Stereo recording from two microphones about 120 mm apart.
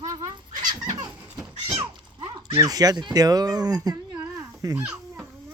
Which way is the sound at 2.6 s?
30° right (ahead or behind).